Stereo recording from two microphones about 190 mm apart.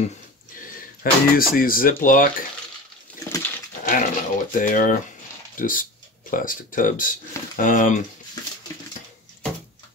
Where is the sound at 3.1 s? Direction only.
5° left (ahead or behind).